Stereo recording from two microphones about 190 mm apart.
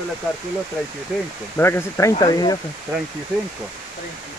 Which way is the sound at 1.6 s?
15° left (ahead or behind).